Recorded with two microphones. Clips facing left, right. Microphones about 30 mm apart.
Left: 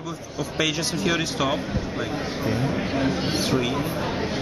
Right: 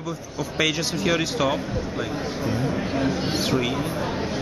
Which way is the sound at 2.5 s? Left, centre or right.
Centre.